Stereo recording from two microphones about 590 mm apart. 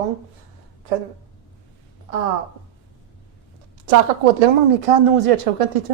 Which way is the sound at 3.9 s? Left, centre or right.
Right.